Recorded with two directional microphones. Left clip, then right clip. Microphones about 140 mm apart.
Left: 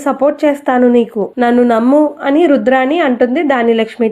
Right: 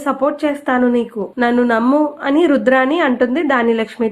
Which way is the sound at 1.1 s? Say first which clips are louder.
Left 4 dB; 20° left (ahead or behind).